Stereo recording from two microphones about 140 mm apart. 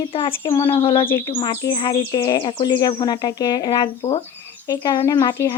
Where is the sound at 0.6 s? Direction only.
40° left (ahead or behind).